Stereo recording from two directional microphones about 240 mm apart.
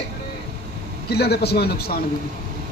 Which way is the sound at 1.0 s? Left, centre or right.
Left.